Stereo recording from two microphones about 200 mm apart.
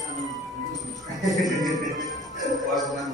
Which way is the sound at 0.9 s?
Centre (ahead or behind).